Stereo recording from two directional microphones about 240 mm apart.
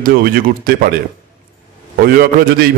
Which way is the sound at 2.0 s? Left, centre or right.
Right.